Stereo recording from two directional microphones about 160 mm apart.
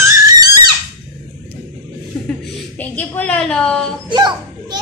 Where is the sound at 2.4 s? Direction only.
5° left (ahead or behind).